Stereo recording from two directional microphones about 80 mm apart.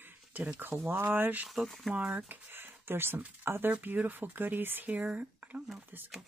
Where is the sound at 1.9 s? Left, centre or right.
Centre.